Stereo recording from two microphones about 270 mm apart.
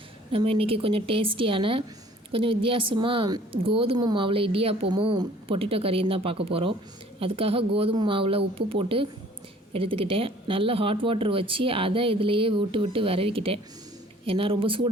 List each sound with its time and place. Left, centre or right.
0.3 s a woman's voice: centre